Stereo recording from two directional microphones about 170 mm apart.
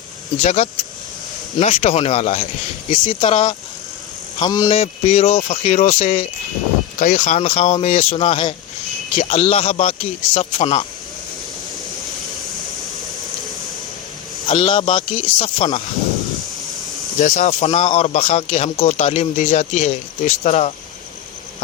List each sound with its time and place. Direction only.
0.4 s a man's voice: 45° left (ahead or behind); by 4.7 s 25° left (ahead or behind)
4.7 s speech: 35° left (ahead or behind)
7.0 s speech: 50° left (ahead or behind)
7.3 s speech: 35° left (ahead or behind)
14.4 s speech: 30° left (ahead or behind)
17.2 s speech: 45° left (ahead or behind)